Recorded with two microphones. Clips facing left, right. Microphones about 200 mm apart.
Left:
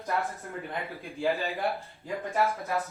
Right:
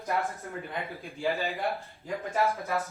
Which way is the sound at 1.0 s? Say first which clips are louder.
Left 2 dB; centre (ahead or behind).